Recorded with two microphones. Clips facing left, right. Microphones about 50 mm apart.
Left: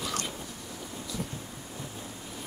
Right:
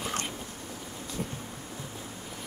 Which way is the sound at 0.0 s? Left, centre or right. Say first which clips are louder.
Even; right.